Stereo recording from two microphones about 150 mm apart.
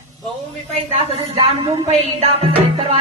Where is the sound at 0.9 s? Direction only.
45° right (ahead or behind).